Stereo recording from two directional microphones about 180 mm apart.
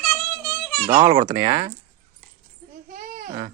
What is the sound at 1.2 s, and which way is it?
Speech, 20° right (ahead or behind).